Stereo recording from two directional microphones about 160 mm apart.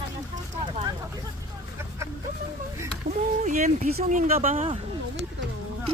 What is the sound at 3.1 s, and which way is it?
Speech, 50° right (ahead or behind).